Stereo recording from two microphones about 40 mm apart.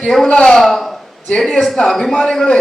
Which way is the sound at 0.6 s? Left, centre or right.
Centre.